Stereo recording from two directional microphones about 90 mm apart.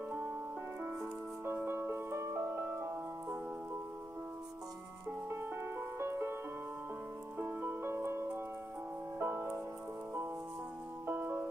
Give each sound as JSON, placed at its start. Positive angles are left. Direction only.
{"t": 1.4, "sound": "music", "side_deg": -25}
{"t": 5.3, "sound": "music", "side_deg": -25}
{"t": 7.3, "sound": "music", "side_deg": -25}
{"t": 11.1, "sound": "music", "side_deg": -25}